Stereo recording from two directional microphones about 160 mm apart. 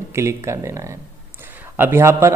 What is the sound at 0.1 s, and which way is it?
A man's voice, 15° right (ahead or behind).